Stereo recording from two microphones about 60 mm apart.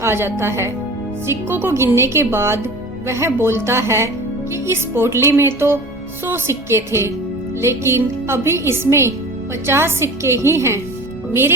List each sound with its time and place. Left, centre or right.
0.0 s a woman's voice: right